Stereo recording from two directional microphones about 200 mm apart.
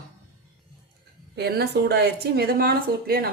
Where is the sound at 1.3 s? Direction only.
55° right (ahead or behind).